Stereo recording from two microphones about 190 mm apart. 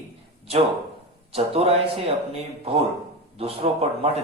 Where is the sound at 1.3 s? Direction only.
30° right (ahead or behind).